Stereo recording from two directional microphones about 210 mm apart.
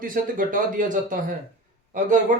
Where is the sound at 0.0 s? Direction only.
40° right (ahead or behind).